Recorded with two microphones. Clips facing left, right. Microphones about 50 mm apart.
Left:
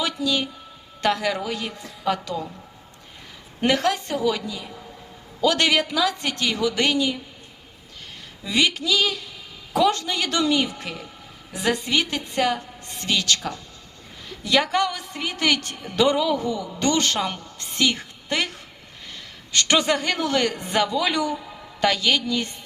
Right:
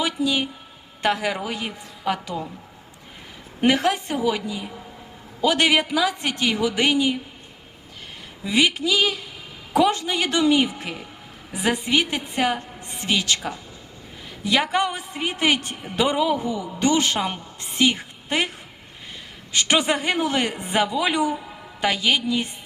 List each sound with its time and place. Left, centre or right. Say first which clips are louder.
0.0 s a woman's voice: right 1 dB; right
3.6 s a woman's voice: right 1 dB; right
8.4 s a woman's voice: right 2 dB; centre
19.5 s a woman's voice: even; centre